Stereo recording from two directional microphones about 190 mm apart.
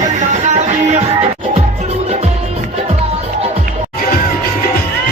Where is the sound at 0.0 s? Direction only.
40° right (ahead or behind).